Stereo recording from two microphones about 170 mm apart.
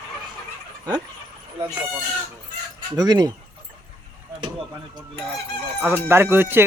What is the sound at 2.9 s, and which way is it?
Fowl, 25° right (ahead or behind).